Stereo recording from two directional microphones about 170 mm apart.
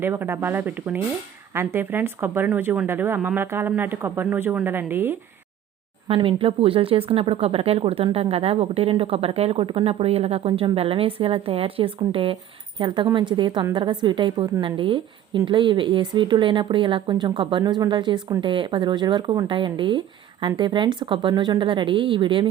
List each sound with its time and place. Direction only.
0.0 s speech: 15° right (ahead or behind)
6.1 s a woman's voice: 30° right (ahead or behind)